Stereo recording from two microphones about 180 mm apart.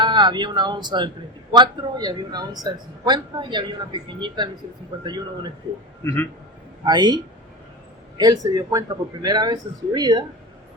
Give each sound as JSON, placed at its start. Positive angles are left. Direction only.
{"t": 0.0, "sound": "speech", "side_deg": -25}
{"t": 6.8, "sound": "speech", "side_deg": -25}
{"t": 8.2, "sound": "speech", "side_deg": -20}